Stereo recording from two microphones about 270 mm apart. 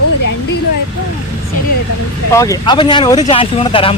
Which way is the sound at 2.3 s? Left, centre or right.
Centre.